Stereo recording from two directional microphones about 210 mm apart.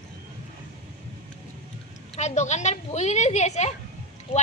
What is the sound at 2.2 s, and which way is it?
Speech, 35° left (ahead or behind).